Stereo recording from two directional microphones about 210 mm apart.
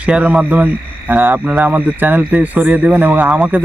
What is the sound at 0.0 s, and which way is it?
Speech, 5° right (ahead or behind).